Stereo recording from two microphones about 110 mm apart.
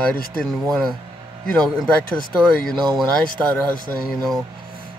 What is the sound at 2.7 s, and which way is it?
Speech, 40° right (ahead or behind).